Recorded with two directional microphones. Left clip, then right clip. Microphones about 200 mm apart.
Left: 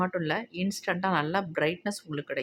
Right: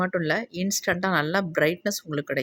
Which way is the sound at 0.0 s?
15° right (ahead or behind).